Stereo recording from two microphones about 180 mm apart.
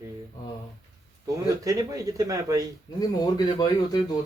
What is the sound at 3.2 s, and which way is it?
Speech, 20° left (ahead or behind).